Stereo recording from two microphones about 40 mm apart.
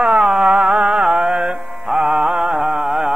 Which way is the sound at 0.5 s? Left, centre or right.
Centre.